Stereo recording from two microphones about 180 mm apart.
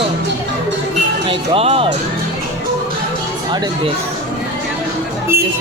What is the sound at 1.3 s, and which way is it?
Speech, 30° right (ahead or behind).